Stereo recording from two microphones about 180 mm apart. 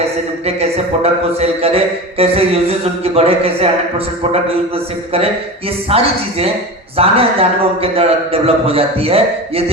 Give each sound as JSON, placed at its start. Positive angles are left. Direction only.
{"t": 0.4, "sound": "a man's voice", "side_deg": -35}
{"t": 5.9, "sound": "a man's voice", "side_deg": -35}